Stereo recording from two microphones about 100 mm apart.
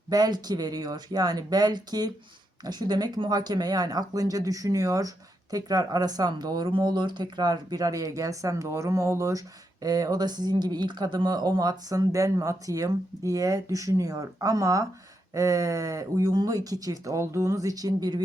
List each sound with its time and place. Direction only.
0.1 s speech: 45° right (ahead or behind)